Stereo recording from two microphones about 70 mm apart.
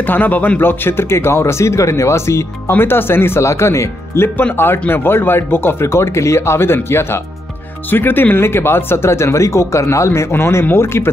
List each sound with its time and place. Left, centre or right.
0.0 s speech: left